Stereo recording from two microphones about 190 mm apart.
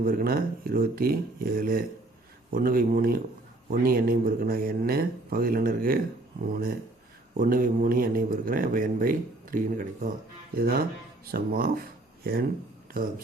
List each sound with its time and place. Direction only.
0.0 s a man's voice: 50° right (ahead or behind)